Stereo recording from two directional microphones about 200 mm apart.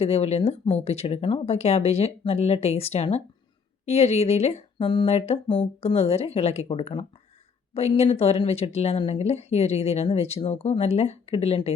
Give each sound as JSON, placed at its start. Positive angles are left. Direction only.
{"t": 0.0, "sound": "speech", "side_deg": 30}